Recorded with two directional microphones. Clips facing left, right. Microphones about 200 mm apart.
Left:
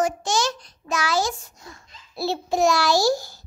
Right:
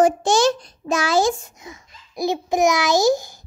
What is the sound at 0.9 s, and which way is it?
Speech, 50° right (ahead or behind).